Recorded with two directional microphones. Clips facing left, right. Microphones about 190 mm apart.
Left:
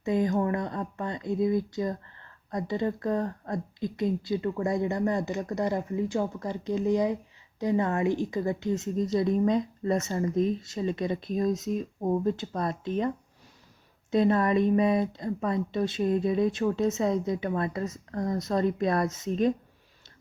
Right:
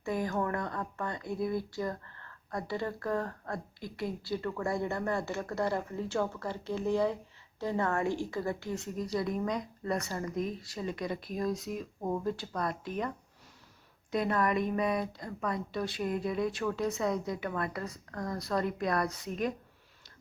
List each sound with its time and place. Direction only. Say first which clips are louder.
0.0 s speech: left 6 dB; 20° left (ahead or behind)